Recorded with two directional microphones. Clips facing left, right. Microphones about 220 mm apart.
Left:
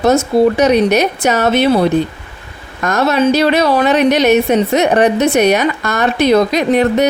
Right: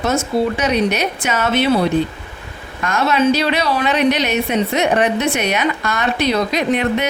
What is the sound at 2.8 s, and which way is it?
A woman's voice, 40° left (ahead or behind).